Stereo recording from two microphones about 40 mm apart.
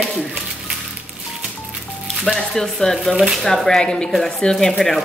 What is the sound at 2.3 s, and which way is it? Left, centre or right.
Speech, centre.